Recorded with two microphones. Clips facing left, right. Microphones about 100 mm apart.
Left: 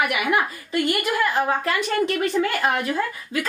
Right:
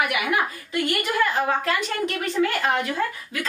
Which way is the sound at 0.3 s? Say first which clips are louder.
Left 2 dB; 20° left (ahead or behind).